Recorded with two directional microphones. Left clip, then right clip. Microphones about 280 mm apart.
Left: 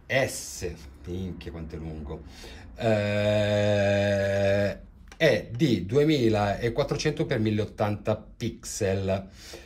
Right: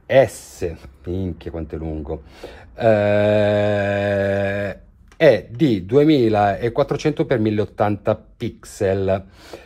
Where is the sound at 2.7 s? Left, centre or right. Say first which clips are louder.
Right 10 dB; centre.